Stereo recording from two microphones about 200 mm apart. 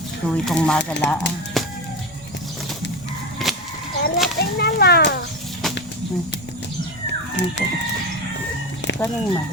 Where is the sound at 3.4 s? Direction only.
Centre (ahead or behind).